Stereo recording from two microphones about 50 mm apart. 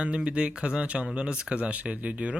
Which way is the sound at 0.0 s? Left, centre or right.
Right.